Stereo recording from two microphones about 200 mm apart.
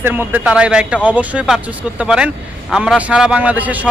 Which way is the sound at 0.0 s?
10° right (ahead or behind).